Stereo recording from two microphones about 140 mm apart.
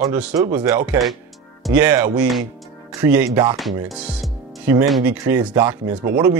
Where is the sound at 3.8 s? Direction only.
Centre (ahead or behind).